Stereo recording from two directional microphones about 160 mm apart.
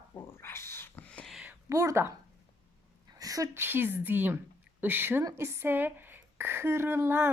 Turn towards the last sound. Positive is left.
turn(degrees=-15)  # may be behind; listen again after turning